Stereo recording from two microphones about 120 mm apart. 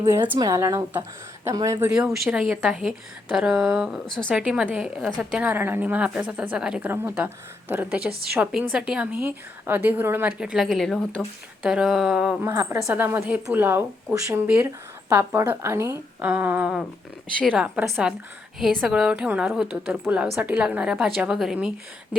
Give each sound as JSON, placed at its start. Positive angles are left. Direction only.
{"t": 0.0, "sound": "speech", "side_deg": -20}
{"t": 1.9, "sound": "speech", "side_deg": -5}
{"t": 4.3, "sound": "a woman's voice", "side_deg": -10}
{"t": 5.4, "sound": "a woman's voice", "side_deg": -15}
{"t": 6.9, "sound": "a woman's voice", "side_deg": -15}
{"t": 12.4, "sound": "a woman's voice", "side_deg": -20}